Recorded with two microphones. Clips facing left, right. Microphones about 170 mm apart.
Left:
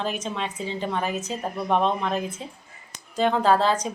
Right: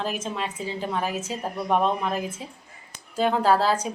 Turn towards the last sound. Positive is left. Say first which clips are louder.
# left 1 dB
turn(degrees=-5)  # may be behind; listen again after turning